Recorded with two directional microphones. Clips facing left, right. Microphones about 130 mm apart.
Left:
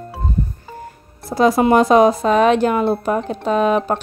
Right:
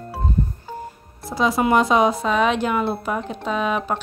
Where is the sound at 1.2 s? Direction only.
45° left (ahead or behind).